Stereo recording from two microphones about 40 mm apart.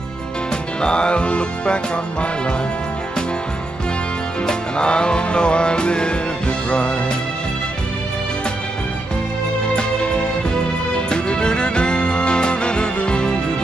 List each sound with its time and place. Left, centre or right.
0.7 s music: left
4.5 s music: left
9.8 s music: left